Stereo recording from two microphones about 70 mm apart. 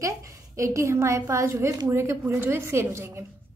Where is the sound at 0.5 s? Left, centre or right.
Right.